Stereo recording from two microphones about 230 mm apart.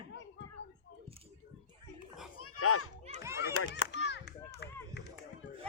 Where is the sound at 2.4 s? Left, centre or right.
Left.